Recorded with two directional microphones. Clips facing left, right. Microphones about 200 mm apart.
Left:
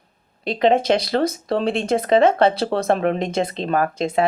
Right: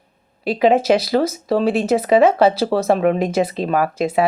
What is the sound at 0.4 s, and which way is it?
Speech, 5° right (ahead or behind).